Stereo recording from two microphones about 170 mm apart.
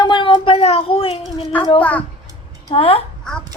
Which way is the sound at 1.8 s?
10° left (ahead or behind).